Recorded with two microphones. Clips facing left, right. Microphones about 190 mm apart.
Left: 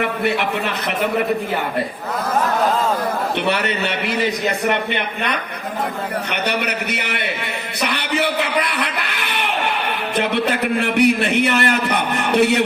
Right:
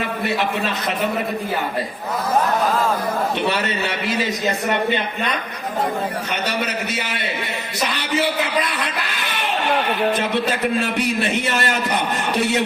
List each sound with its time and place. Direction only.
3.5 s a man's voice: 60° left (ahead or behind)
6.3 s a man's voice: 65° left (ahead or behind)